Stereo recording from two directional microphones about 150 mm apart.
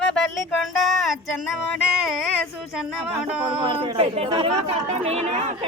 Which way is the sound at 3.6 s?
35° right (ahead or behind).